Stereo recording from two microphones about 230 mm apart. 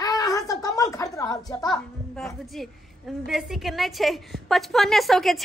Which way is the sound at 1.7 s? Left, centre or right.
Centre.